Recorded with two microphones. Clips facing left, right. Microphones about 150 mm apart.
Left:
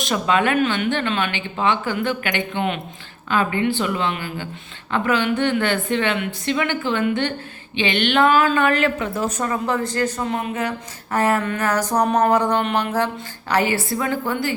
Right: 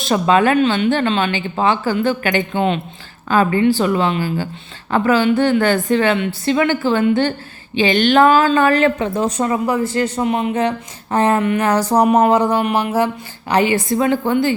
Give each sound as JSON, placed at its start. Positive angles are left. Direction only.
{"t": 0.0, "sound": "a woman's voice", "side_deg": -35}
{"t": 12.5, "sound": "a woman's voice", "side_deg": -5}